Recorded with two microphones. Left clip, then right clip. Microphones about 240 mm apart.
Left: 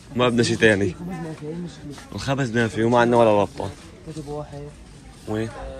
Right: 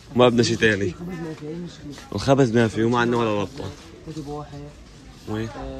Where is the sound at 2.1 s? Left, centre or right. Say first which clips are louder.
Right 6 dB; right; by 3.7 s centre.